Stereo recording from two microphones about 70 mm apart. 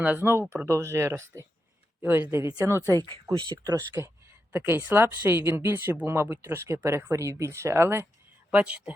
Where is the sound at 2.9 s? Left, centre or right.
Right.